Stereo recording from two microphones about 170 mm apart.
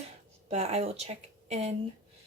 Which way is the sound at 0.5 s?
40° right (ahead or behind).